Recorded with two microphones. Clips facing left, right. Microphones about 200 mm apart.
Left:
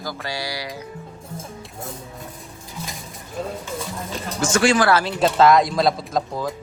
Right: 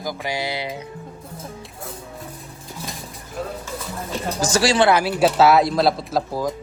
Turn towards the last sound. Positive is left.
turn(degrees=-10)  # may be behind; listen again after turning